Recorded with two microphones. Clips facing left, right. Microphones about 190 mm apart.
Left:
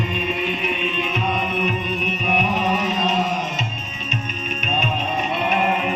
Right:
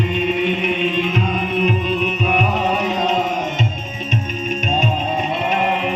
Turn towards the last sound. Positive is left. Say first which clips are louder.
# right 5 dB
turn(degrees=-40)  # may be behind; listen again after turning